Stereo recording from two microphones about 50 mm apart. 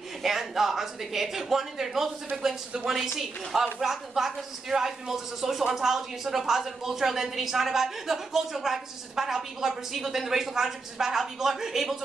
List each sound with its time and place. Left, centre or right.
0.2 s speech: centre
3.8 s speech: centre